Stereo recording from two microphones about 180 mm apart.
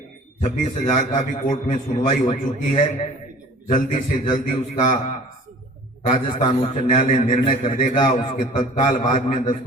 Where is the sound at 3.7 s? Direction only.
45° left (ahead or behind).